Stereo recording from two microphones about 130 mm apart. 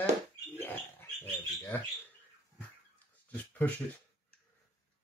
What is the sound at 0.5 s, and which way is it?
Bird, 15° left (ahead or behind).